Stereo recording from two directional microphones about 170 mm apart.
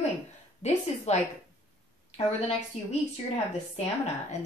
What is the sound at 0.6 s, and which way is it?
Speech, 40° left (ahead or behind).